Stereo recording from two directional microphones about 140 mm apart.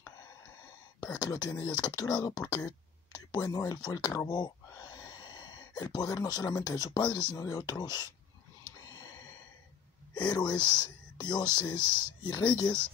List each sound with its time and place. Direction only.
1.1 s speech: 30° left (ahead or behind)
8.8 s gasp: 25° left (ahead or behind)
10.2 s speech: 30° left (ahead or behind)